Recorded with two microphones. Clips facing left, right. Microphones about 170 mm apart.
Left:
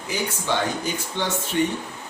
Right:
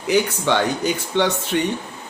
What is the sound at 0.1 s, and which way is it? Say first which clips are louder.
Speech: right 8 dB; 75° right (ahead or behind).